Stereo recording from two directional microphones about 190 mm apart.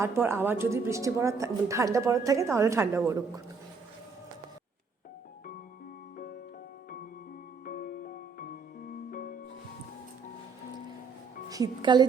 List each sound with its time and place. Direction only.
0.0 s a woman's voice: 15° right (ahead or behind)
7.6 s music: 45° left (ahead or behind)
11.4 s a woman's voice: 20° right (ahead or behind)